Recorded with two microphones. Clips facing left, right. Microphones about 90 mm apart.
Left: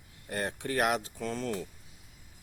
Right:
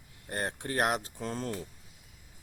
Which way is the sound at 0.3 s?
35° right (ahead or behind).